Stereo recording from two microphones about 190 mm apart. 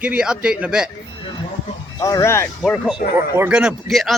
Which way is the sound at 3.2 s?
15° right (ahead or behind).